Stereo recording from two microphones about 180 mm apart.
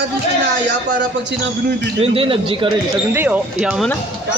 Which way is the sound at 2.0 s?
30° right (ahead or behind).